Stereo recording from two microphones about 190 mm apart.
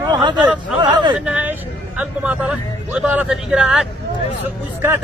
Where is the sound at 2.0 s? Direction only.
5° right (ahead or behind).